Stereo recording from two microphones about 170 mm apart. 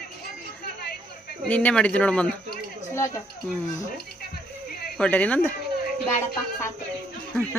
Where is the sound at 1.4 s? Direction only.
10° left (ahead or behind).